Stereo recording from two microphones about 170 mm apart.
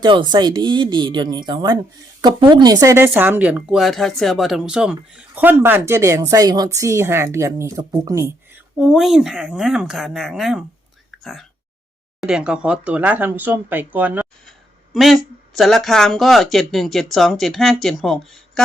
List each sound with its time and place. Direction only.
0.0 s speech: 25° right (ahead or behind)
2.7 s speech: 15° right (ahead or behind)
8.8 s speech: centre (ahead or behind)